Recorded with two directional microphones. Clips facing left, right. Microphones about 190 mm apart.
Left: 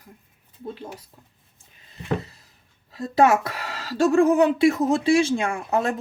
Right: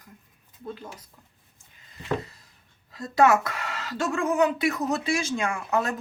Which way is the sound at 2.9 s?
25° left (ahead or behind).